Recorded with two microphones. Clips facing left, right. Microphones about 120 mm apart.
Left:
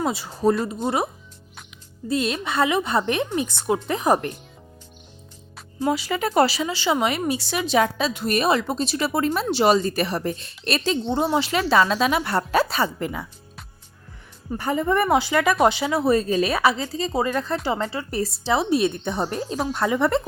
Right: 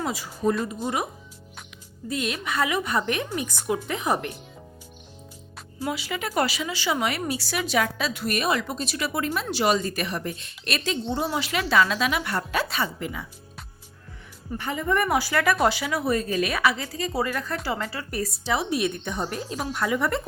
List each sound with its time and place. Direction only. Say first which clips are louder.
0.0 s speech: left 4 dB; 25° left (ahead or behind)
2.0 s speech: left 5 dB; 30° left (ahead or behind)
5.8 s speech: left 6 dB; 40° left (ahead or behind)
14.6 s speech: left 4 dB; 35° left (ahead or behind)